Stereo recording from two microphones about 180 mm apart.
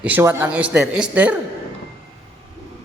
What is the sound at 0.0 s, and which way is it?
A man's voice, 10° right (ahead or behind).